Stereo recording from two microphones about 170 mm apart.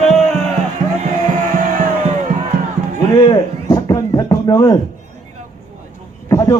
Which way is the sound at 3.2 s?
20° left (ahead or behind).